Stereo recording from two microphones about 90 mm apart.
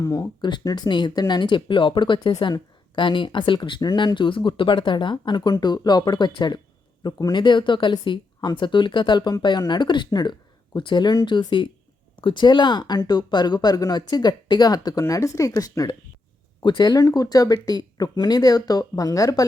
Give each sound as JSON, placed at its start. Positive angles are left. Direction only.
{"t": 0.0, "sound": "speech", "side_deg": 40}
{"t": 0.4, "sound": "speech", "side_deg": 50}
{"t": 7.0, "sound": "speech", "side_deg": 40}
{"t": 7.3, "sound": "speech", "side_deg": 60}
{"t": 15.0, "sound": "speech", "side_deg": 35}
{"t": 16.6, "sound": "speech", "side_deg": 55}